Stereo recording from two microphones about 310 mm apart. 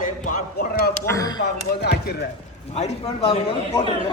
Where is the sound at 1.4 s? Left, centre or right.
Left.